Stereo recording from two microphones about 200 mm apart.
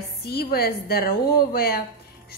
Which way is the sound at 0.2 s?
55° left (ahead or behind).